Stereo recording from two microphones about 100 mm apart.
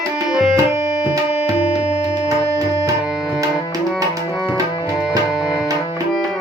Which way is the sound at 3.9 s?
5° left (ahead or behind).